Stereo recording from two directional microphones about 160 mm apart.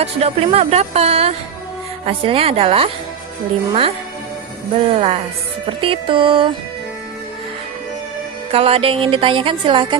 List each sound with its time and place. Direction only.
0.0 s music: 40° right (ahead or behind)
4.8 s music: 40° right (ahead or behind)
8.4 s music: 35° right (ahead or behind)